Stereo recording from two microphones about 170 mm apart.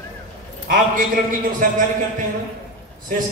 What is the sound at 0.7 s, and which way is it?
Speech, 50° right (ahead or behind).